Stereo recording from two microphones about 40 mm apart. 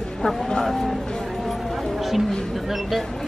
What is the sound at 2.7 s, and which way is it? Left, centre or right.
Speech, centre.